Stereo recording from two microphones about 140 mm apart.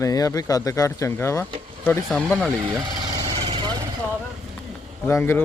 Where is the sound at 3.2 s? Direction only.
45° right (ahead or behind).